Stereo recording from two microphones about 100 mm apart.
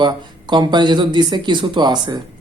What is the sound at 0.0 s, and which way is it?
Speech, 50° right (ahead or behind).